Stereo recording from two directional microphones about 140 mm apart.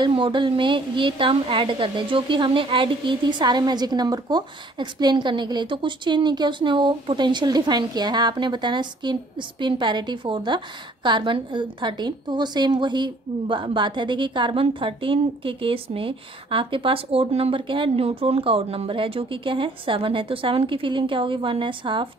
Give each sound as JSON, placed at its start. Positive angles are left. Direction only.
{"t": 0.0, "sound": "a woman's voice", "side_deg": -35}